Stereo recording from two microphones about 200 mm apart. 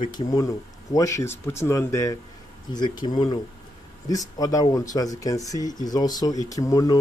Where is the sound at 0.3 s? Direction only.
20° left (ahead or behind).